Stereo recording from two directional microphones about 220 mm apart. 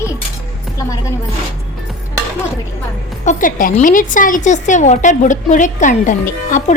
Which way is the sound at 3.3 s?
35° left (ahead or behind).